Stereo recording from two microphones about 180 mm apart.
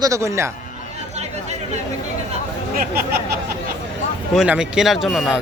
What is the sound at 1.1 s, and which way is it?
Chatter, 40° right (ahead or behind).